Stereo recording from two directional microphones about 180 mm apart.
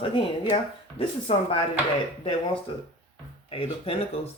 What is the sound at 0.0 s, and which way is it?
Speech, 30° left (ahead or behind).